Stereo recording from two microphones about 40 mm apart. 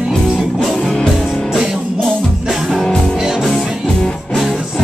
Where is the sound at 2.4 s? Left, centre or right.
Centre.